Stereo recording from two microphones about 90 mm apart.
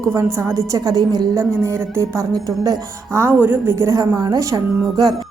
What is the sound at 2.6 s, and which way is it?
Speech, 40° right (ahead or behind).